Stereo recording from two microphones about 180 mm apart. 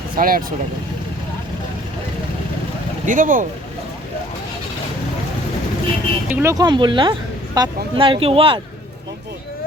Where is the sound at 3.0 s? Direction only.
45° right (ahead or behind).